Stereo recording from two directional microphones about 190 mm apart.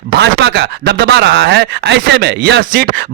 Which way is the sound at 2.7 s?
55° right (ahead or behind).